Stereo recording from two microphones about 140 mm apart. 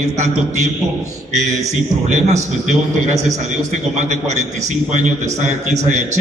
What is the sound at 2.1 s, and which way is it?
A man's voice, 60° right (ahead or behind).